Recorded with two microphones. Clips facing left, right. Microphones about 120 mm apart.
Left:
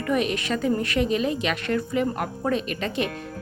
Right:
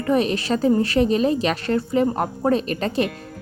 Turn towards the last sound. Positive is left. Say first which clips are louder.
# right 5 dB
turn(degrees=-35)  # may be behind; listen again after turning